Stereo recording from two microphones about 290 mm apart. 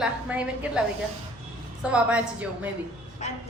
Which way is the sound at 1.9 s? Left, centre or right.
Centre.